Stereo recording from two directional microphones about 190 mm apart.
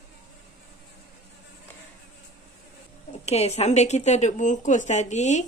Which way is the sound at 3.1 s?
35° left (ahead or behind).